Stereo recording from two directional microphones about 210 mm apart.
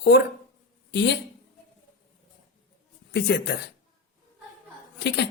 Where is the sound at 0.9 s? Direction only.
55° left (ahead or behind).